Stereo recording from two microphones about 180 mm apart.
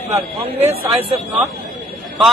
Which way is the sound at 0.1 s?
35° right (ahead or behind).